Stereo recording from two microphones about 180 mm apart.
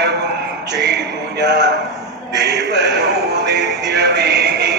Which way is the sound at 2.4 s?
70° right (ahead or behind).